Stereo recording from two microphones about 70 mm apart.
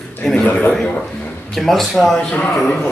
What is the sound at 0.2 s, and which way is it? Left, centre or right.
A man's voice, centre.